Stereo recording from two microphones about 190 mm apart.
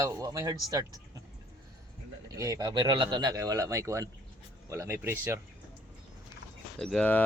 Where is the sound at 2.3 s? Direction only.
20° right (ahead or behind).